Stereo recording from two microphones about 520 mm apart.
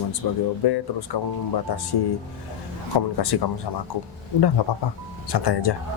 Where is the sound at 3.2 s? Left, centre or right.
Left.